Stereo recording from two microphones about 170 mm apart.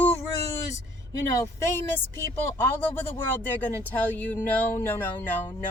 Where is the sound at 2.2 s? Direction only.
10° left (ahead or behind).